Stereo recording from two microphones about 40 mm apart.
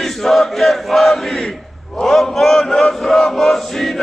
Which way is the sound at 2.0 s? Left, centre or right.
Centre.